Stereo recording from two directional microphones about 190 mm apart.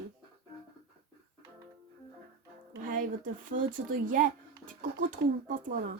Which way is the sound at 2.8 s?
45° right (ahead or behind).